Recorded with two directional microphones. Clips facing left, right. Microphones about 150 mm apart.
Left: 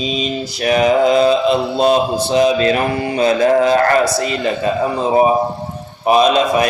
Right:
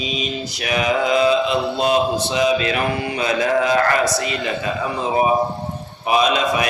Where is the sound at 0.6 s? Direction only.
35° left (ahead or behind).